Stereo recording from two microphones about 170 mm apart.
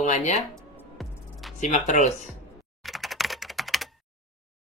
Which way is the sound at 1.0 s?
Centre (ahead or behind).